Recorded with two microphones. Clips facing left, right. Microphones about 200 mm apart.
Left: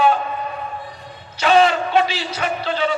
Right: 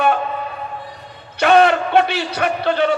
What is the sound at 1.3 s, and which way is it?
A man's voice, 60° right (ahead or behind).